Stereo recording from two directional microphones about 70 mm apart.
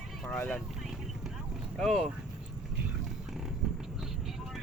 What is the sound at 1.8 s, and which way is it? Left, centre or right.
Speech, centre.